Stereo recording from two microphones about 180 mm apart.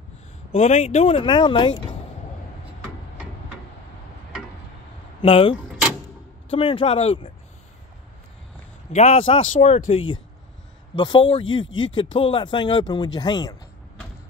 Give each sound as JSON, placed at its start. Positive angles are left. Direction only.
{"t": 0.5, "sound": "speech", "side_deg": 35}
{"t": 5.2, "sound": "speech", "side_deg": 30}
{"t": 8.9, "sound": "speech", "side_deg": 35}